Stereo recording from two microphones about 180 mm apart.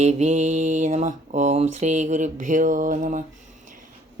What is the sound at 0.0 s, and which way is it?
A woman's voice, 40° right (ahead or behind).